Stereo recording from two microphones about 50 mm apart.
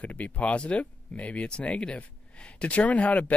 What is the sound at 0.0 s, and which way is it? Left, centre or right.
Speech, left.